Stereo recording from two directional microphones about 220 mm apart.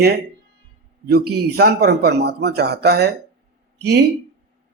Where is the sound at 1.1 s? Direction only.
45° right (ahead or behind).